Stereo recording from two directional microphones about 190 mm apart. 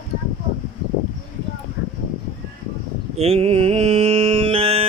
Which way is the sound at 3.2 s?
30° right (ahead or behind).